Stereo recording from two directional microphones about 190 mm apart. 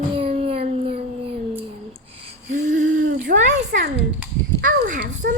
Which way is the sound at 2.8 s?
90° right.